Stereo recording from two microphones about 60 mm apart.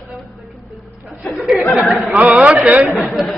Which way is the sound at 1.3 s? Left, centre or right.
Centre.